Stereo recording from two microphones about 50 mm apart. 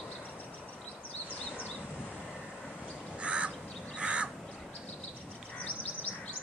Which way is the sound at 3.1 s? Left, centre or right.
Right.